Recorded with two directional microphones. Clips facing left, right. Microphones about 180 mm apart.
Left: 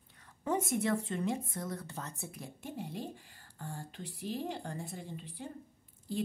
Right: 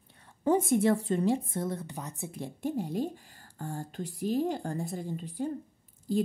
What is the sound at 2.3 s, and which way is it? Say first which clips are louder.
Speech: right 11 dB; 30° right (ahead or behind).